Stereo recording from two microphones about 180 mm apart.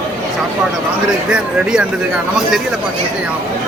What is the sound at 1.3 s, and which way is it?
Speech, 5° right (ahead or behind).